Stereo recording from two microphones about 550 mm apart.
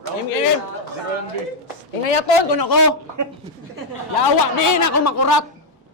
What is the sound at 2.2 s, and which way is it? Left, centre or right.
Speech, left.